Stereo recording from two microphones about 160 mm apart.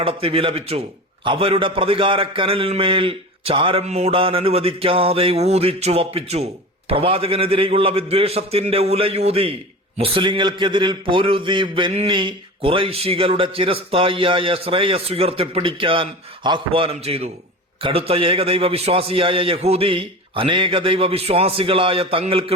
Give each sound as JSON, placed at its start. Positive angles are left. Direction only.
{"t": 0.0, "sound": "a man's voice", "side_deg": -35}